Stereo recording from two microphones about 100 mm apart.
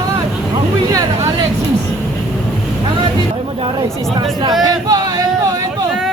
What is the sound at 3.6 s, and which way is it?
Speech, 55° right (ahead or behind).